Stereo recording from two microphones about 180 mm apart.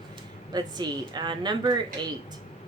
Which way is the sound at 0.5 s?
25° right (ahead or behind).